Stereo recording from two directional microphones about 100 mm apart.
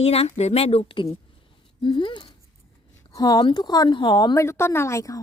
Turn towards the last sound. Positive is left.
turn(degrees=30)  # may be behind; listen again after turning